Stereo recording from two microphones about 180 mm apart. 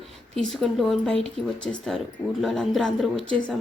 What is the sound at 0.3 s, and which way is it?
A woman's voice, centre (ahead or behind).